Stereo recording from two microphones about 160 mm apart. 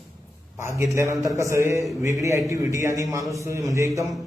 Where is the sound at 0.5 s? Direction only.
15° right (ahead or behind).